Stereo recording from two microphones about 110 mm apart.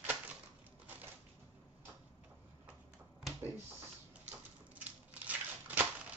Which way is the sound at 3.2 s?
Centre (ahead or behind).